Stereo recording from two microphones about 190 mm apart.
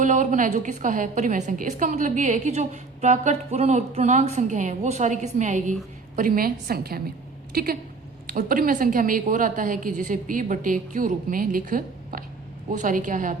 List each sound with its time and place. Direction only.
0.0 s a woman's voice: 40° right (ahead or behind)